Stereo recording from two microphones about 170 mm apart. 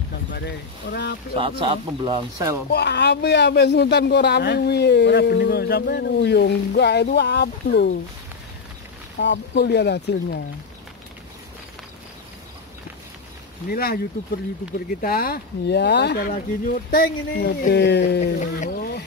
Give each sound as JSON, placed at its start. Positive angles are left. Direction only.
{"t": 0.3, "sound": "speech", "side_deg": 80}
{"t": 1.3, "sound": "speech", "side_deg": -30}
{"t": 2.7, "sound": "speech", "side_deg": 85}
{"t": 9.2, "sound": "speech", "side_deg": 90}
{"t": 13.7, "sound": "speech", "side_deg": 60}
{"t": 15.0, "sound": "speech", "side_deg": 60}
{"t": 18.2, "sound": "speech", "side_deg": 55}